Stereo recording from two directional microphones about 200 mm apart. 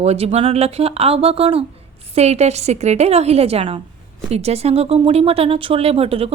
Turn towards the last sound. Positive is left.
turn(degrees=-30)  # may be behind; listen again after turning